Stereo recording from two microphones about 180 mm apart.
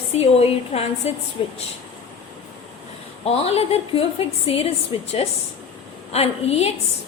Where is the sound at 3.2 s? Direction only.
35° left (ahead or behind).